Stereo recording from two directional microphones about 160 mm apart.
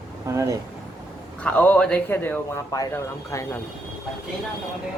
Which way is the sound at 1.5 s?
10° left (ahead or behind).